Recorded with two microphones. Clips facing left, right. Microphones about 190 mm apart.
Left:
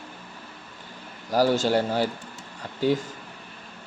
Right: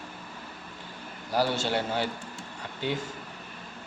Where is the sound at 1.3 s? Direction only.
40° left (ahead or behind).